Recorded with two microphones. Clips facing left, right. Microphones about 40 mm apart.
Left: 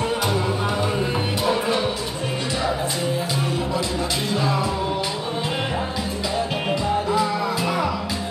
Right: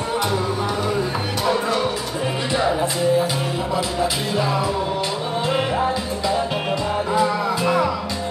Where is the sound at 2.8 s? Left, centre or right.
Centre.